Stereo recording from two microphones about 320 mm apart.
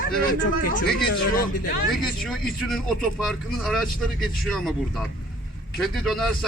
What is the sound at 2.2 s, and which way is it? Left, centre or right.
Speech, centre.